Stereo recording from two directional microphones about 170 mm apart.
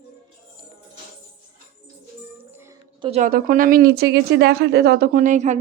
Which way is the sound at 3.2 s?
55° right (ahead or behind).